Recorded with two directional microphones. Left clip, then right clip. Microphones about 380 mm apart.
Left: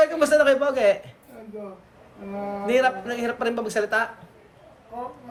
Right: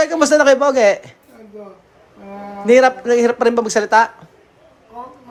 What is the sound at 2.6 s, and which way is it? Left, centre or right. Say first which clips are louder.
Speech: right 10 dB; centre.